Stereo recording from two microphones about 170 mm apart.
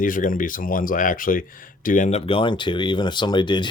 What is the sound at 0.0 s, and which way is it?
Speech, 50° left (ahead or behind).